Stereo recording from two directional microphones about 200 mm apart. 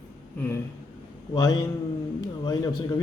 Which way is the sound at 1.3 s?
15° left (ahead or behind).